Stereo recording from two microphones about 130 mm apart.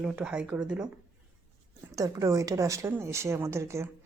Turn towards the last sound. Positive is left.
turn(degrees=-20)  # may be behind; listen again after turning